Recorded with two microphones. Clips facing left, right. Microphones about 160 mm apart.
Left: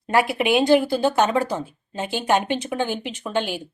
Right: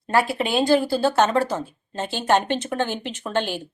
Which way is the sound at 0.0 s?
15° left (ahead or behind).